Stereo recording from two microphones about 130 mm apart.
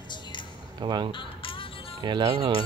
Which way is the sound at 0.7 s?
35° right (ahead or behind).